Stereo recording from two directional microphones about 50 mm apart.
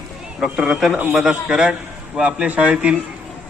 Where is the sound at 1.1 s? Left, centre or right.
Centre.